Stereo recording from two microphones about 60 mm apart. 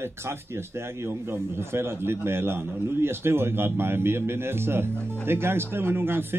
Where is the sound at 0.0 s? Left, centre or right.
Right.